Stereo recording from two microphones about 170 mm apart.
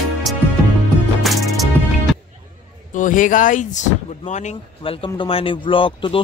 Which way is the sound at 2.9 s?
50° left (ahead or behind).